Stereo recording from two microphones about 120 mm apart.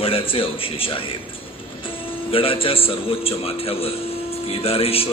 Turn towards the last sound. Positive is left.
turn(degrees=55)  # may be behind; listen again after turning